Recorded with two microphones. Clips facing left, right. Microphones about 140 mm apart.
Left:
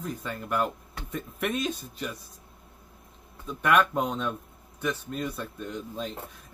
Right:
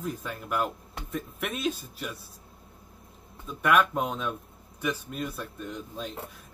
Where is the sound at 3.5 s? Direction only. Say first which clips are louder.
Even; centre (ahead or behind).